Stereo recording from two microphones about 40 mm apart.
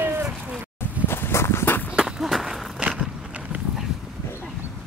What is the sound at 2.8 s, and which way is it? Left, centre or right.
Vehicle, right.